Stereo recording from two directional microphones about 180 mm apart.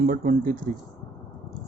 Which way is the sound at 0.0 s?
50° right (ahead or behind).